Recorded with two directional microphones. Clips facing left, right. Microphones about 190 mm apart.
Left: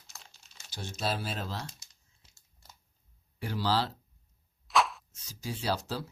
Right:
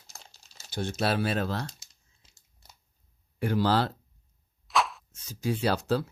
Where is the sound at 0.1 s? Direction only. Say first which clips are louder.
Right 2 dB; 35° right (ahead or behind).